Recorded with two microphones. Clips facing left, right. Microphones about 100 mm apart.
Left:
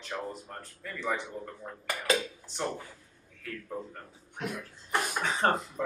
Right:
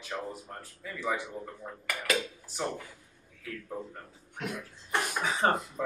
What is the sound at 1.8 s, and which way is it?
Speech, 20° left (ahead or behind).